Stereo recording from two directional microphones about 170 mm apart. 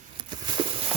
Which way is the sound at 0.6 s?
30° right (ahead or behind).